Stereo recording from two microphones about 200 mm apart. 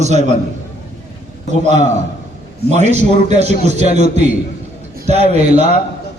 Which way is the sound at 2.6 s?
35° right (ahead or behind).